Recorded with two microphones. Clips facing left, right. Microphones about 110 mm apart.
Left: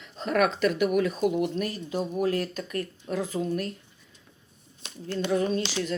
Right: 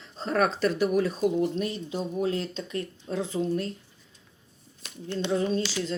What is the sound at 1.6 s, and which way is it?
Speech, 50° left (ahead or behind).